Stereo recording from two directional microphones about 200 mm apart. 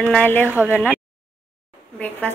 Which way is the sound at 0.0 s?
5° left (ahead or behind).